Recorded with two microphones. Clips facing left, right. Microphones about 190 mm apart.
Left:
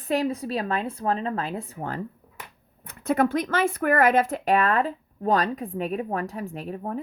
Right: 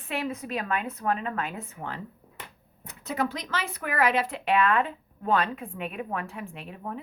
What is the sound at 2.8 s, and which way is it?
A woman's voice, 55° left (ahead or behind).